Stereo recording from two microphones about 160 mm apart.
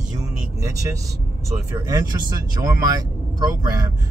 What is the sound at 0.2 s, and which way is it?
Vehicle, 20° right (ahead or behind).